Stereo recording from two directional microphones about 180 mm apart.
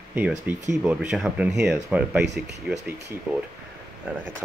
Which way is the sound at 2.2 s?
70° right (ahead or behind).